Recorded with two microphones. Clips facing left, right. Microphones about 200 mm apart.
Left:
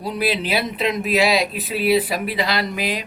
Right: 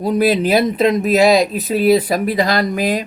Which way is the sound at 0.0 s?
45° right (ahead or behind).